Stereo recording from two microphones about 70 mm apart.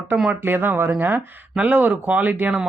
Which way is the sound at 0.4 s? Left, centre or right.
Right.